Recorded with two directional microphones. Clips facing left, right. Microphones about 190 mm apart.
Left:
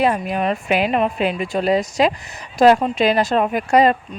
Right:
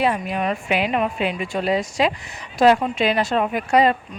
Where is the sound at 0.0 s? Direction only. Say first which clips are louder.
Left 3 dB; 40° left (ahead or behind).